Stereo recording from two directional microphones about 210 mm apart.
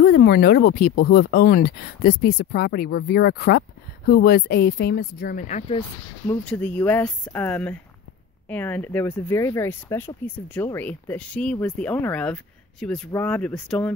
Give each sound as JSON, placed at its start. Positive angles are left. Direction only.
{"t": 0.0, "sound": "speech", "side_deg": 50}
{"t": 5.8, "sound": "speech", "side_deg": 10}